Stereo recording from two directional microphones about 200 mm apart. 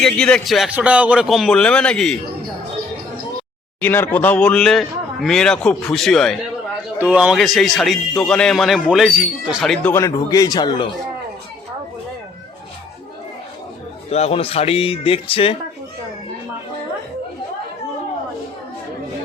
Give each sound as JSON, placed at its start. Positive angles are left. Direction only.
{"t": 0.0, "sound": "speech", "side_deg": 5}
{"t": 3.8, "sound": "speech", "side_deg": 10}
{"t": 9.9, "sound": "speech", "side_deg": 15}
{"t": 14.1, "sound": "speech", "side_deg": 30}